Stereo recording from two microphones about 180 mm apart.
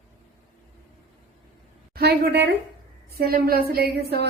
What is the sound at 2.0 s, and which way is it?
Speech, 65° right (ahead or behind).